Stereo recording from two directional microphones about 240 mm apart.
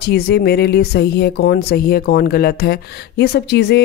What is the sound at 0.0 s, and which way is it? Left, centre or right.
Speech, left.